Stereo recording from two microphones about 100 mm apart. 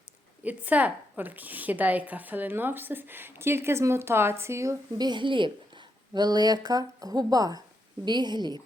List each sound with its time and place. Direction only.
0.4 s a woman's voice: 15° right (ahead or behind)
4.9 s a woman's voice: 50° right (ahead or behind)